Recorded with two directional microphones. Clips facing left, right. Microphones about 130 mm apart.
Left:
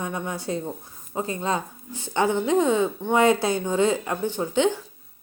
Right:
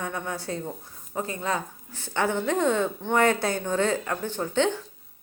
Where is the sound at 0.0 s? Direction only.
15° left (ahead or behind).